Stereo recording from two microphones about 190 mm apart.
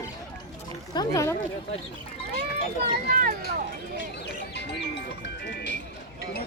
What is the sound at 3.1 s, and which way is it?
Speech, 50° right (ahead or behind).